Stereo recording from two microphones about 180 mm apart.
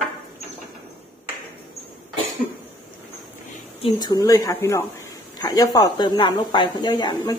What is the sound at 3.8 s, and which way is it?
Speech, 20° left (ahead or behind).